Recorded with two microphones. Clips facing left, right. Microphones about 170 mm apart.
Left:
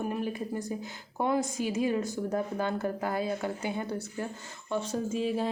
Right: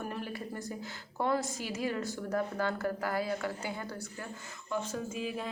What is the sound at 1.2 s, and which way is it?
A woman's voice, 15° left (ahead or behind).